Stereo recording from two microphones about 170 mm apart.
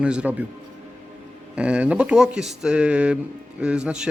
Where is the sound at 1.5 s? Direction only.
5° right (ahead or behind).